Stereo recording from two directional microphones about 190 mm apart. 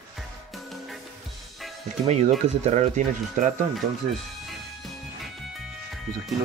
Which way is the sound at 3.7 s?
Centre (ahead or behind).